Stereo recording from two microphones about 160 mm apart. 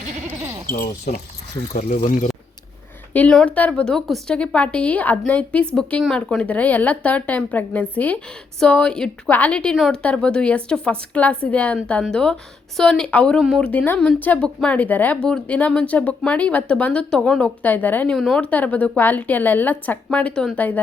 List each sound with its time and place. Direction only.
0.7 s speech: 60° left (ahead or behind)
3.1 s a woman's voice: 10° left (ahead or behind)